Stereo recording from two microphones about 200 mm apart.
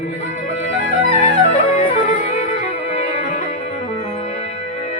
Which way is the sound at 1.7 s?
35° left (ahead or behind).